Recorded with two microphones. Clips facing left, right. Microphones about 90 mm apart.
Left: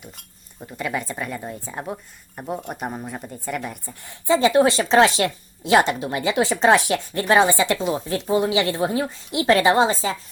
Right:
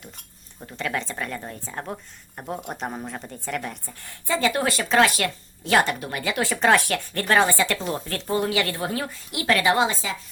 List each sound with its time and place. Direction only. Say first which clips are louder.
0.0 s speech: left 2 dB; 5° left (ahead or behind)
4.0 s speech: left 6 dB; 20° left (ahead or behind); by 10.2 s 35° left (ahead or behind)